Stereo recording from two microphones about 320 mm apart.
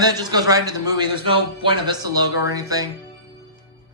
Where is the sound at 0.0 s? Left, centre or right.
Centre.